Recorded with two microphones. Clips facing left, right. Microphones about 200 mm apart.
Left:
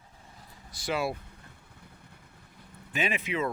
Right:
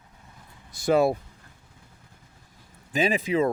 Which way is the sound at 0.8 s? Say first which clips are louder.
Right 10 dB; 45° right (ahead or behind).